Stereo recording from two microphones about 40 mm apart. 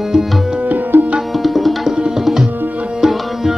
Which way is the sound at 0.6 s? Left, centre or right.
Right.